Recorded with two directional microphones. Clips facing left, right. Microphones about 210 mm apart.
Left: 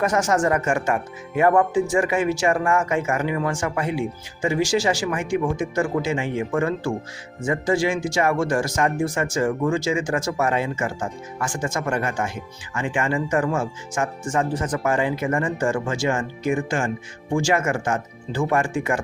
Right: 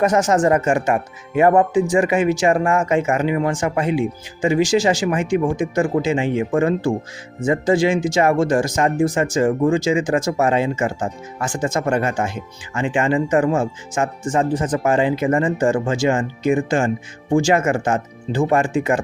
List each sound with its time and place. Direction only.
0.0 s speech: 20° right (ahead or behind)